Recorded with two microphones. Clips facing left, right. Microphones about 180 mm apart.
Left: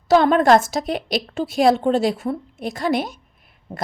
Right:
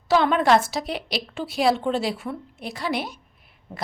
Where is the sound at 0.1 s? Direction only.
45° left (ahead or behind).